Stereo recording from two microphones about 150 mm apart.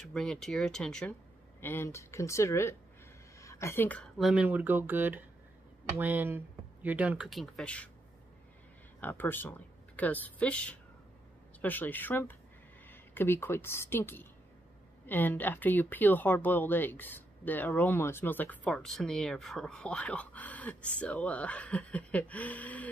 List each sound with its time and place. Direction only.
0.0 s speech: 5° left (ahead or behind)
1.6 s a woman's voice: 15° left (ahead or behind)
4.2 s speech: 5° right (ahead or behind)
9.0 s speech: 15° left (ahead or behind)